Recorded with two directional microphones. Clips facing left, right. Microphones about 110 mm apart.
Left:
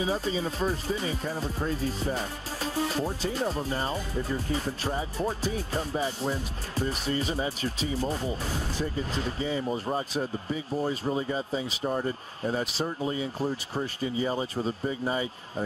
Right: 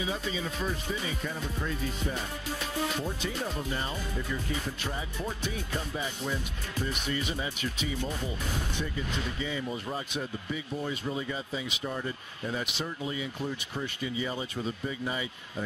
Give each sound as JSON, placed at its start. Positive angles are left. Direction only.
{"t": 0.0, "sound": "speech", "side_deg": 35}